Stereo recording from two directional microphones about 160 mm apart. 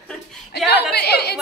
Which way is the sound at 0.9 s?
90° left.